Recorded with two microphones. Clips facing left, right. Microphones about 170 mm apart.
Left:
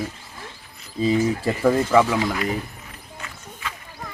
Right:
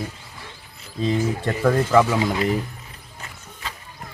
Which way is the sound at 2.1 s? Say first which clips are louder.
Right 2 dB; 25° right (ahead or behind).